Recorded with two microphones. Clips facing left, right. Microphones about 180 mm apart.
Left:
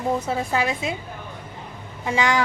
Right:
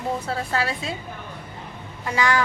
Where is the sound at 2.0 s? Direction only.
20° left (ahead or behind).